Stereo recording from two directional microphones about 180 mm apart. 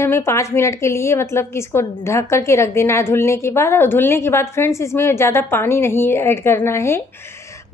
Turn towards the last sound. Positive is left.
turn(degrees=15)  # may be behind; listen again after turning